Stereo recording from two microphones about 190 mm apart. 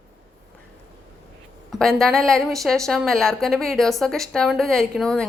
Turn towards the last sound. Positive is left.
turn(degrees=5)  # may be behind; listen again after turning